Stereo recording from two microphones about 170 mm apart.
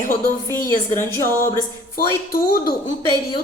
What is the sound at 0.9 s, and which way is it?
Speech, 15° left (ahead or behind).